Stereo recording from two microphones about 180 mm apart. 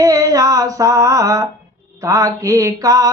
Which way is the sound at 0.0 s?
20° right (ahead or behind).